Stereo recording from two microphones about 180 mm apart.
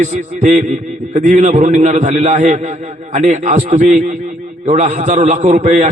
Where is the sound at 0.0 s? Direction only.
45° right (ahead or behind).